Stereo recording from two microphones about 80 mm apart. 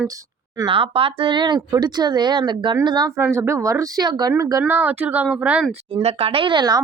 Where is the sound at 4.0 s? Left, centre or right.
Right.